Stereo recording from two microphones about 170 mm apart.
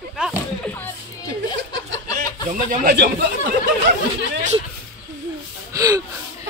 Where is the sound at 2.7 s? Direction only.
60° right (ahead or behind).